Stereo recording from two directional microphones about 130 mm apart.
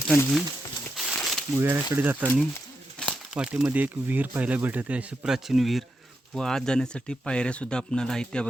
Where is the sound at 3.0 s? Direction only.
5° left (ahead or behind).